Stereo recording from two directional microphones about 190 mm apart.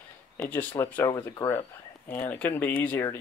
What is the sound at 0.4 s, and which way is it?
Speech, 10° left (ahead or behind).